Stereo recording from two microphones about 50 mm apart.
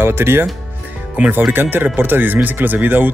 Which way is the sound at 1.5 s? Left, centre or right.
Right.